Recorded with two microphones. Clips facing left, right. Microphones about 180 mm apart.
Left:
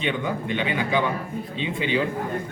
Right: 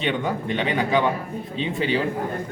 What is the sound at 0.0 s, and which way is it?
Speech, 35° right (ahead or behind).